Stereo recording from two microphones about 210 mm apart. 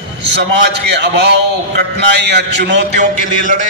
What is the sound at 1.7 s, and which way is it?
A man's voice, 55° right (ahead or behind).